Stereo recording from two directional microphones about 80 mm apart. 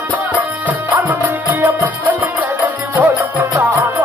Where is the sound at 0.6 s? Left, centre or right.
Right.